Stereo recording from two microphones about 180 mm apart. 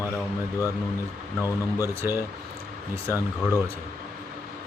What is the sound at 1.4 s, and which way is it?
Speech, 15° left (ahead or behind).